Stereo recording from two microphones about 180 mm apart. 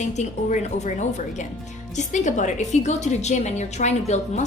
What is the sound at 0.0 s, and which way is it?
A woman's voice, 40° left (ahead or behind).